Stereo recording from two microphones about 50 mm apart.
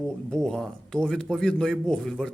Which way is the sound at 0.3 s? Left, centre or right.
Centre.